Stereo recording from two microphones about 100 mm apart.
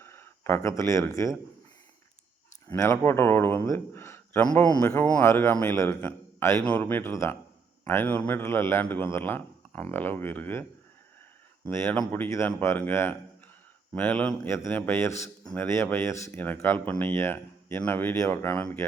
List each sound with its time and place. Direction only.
0.0 s speech: 25° left (ahead or behind)
2.6 s a man's voice: 25° left (ahead or behind)
11.7 s a man's voice: 20° left (ahead or behind)